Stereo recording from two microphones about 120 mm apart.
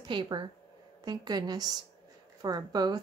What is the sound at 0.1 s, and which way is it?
Speech, 40° right (ahead or behind).